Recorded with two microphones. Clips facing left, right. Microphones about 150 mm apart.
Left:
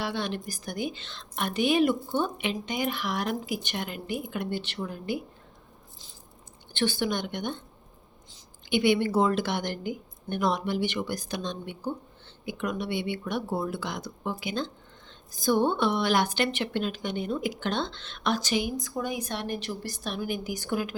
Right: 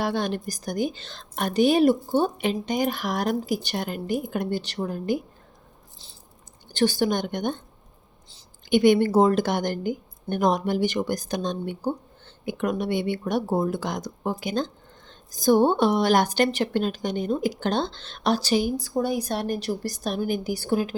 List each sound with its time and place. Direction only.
0.0 s speech: 45° right (ahead or behind)
6.7 s a woman's voice: 40° right (ahead or behind)
8.7 s a woman's voice: 45° right (ahead or behind)